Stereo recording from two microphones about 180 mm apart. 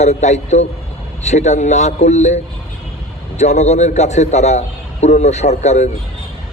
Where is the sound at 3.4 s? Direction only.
40° left (ahead or behind).